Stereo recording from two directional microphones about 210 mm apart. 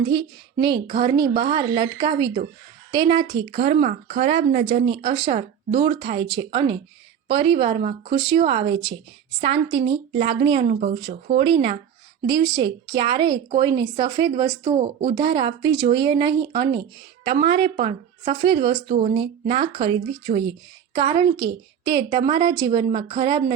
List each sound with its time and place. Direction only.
0.0 s speech: 20° right (ahead or behind)
3.2 s speech: 50° right (ahead or behind)
3.6 s speech: 30° right (ahead or behind)